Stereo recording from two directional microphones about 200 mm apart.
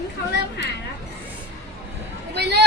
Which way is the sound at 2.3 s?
55° right (ahead or behind).